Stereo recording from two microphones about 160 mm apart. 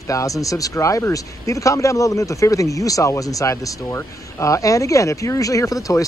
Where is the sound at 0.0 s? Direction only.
20° left (ahead or behind).